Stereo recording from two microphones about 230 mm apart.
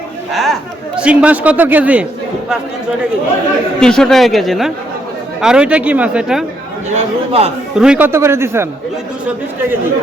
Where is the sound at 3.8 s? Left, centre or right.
Centre.